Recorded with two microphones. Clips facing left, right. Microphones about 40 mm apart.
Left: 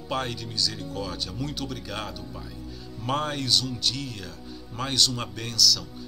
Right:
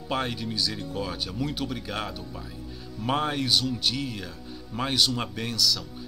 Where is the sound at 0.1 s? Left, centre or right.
Centre.